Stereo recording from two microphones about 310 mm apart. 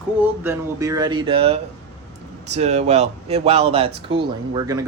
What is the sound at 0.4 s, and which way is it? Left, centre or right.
Speech, centre.